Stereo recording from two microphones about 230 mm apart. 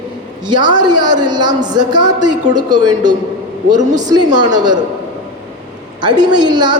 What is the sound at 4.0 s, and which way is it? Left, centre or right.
Speech, centre.